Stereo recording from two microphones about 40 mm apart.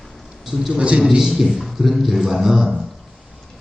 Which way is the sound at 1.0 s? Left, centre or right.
Centre.